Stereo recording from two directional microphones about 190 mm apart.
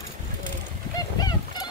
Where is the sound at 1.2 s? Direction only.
20° left (ahead or behind).